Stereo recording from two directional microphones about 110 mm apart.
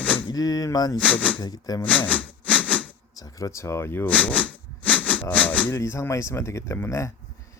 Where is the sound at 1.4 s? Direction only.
35° left (ahead or behind).